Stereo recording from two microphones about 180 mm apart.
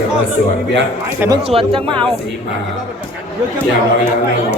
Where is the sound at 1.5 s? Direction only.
30° right (ahead or behind).